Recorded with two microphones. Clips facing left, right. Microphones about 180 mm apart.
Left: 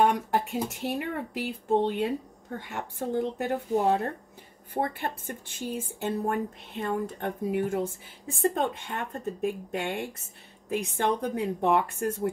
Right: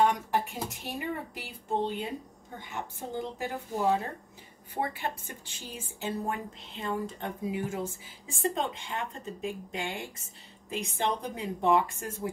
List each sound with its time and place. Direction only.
0.0 s speech: 60° left (ahead or behind)